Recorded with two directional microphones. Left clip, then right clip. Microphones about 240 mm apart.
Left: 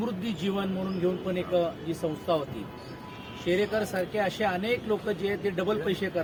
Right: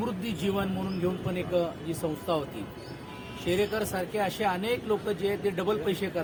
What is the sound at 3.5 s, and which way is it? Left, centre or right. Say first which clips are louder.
Speech: left 1 dB; centre.